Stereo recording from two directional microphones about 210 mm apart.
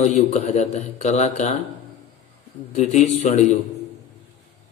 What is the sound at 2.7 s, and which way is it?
Speech, 35° left (ahead or behind).